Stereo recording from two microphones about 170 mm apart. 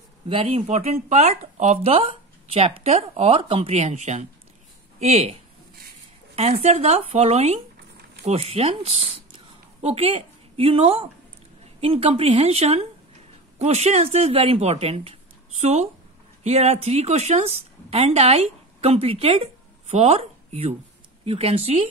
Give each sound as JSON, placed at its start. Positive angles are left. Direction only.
{"t": 0.3, "sound": "speech", "side_deg": -30}
{"t": 6.3, "sound": "a woman's voice", "side_deg": -35}